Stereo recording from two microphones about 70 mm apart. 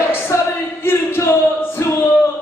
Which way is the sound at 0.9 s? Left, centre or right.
Left.